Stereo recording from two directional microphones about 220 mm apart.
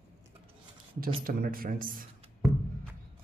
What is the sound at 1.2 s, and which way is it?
Speech, 40° right (ahead or behind).